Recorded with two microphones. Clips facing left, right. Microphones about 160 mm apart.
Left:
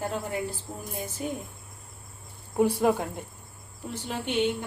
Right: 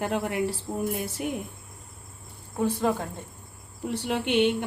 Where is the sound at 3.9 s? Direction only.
70° right (ahead or behind).